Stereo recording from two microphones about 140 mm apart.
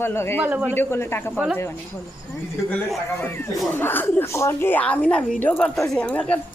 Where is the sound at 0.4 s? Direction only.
10° right (ahead or behind).